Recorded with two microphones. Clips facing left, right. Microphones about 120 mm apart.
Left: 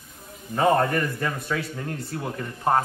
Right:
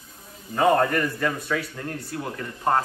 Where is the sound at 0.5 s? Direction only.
Centre (ahead or behind).